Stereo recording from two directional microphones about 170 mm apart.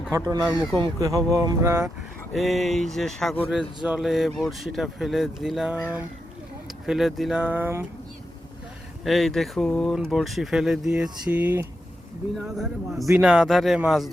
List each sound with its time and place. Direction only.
0.1 s a sound: 20° right (ahead or behind)
2.3 s speech: centre (ahead or behind)
6.8 s speech: centre (ahead or behind)
9.0 s speech: centre (ahead or behind)